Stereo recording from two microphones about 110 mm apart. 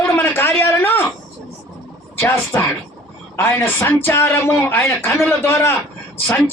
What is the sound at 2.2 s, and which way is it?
Speech, 20° left (ahead or behind).